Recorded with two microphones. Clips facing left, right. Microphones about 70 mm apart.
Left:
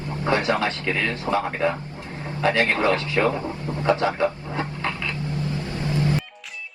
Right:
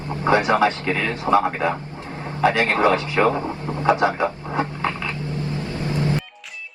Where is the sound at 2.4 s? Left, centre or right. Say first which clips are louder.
Right 3 dB; right.